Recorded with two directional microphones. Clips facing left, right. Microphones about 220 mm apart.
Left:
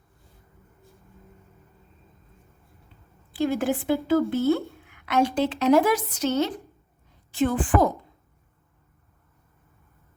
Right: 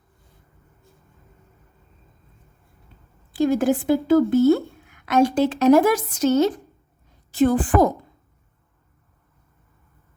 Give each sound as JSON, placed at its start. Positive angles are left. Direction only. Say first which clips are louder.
{"t": 3.3, "sound": "a woman's voice", "louder": "right 5 dB", "side_deg": -45}